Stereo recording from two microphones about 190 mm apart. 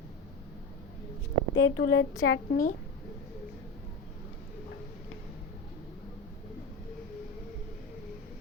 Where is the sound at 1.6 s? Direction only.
80° left.